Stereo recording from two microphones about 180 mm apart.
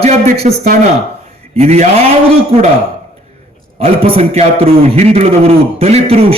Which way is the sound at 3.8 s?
30° right (ahead or behind).